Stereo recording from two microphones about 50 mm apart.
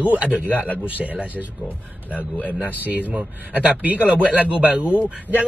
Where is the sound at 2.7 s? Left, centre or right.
Right.